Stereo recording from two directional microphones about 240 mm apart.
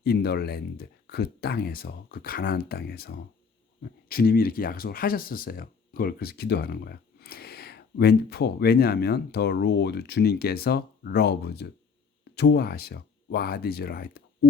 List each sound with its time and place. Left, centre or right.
0.0 s speech: left